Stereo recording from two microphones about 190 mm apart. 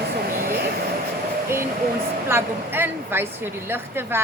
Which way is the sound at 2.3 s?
10° right (ahead or behind).